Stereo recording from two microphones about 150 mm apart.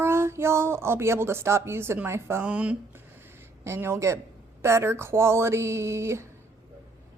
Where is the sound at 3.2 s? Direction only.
15° right (ahead or behind).